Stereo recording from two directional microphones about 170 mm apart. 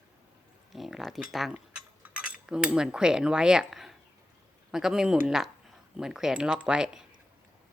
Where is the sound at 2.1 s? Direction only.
5° right (ahead or behind).